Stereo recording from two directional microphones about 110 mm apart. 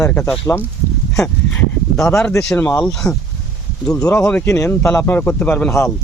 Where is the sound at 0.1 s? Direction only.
10° left (ahead or behind).